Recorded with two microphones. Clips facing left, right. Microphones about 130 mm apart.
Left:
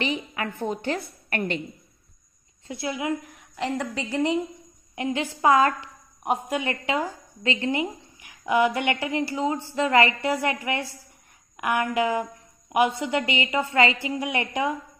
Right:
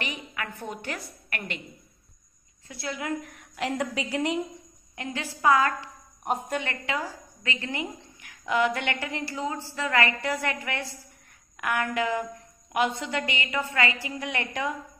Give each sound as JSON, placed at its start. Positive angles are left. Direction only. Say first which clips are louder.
{"t": 0.0, "sound": "a woman's voice", "louder": "left 7 dB", "side_deg": 25}
{"t": 2.7, "sound": "a woman's voice", "louder": "left 4 dB", "side_deg": 15}
{"t": 3.5, "sound": "a woman's voice", "louder": "left 1 dB", "side_deg": -5}
{"t": 4.9, "sound": "a woman's voice", "louder": "left 7 dB", "side_deg": 20}
{"t": 6.2, "sound": "a woman's voice", "louder": "left 3 dB", "side_deg": 5}
{"t": 6.6, "sound": "a woman's voice", "louder": "left 5 dB", "side_deg": 20}